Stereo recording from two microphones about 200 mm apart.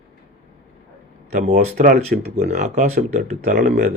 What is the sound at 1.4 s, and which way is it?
Speech, 35° right (ahead or behind).